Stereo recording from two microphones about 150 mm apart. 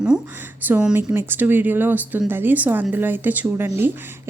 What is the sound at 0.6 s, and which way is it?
Speech, 10° right (ahead or behind).